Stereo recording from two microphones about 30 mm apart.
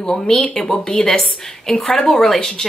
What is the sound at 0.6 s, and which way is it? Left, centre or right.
Speech, left.